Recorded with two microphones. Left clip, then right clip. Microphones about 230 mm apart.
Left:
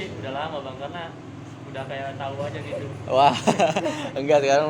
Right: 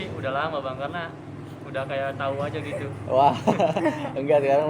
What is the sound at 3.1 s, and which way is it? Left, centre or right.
A man's voice, left.